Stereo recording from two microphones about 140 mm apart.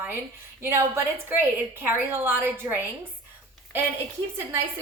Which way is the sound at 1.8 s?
15° right (ahead or behind).